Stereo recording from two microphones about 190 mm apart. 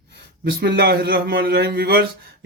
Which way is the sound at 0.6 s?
55° right (ahead or behind).